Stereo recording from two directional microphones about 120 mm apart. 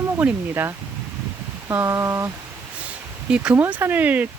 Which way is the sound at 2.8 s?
10° right (ahead or behind).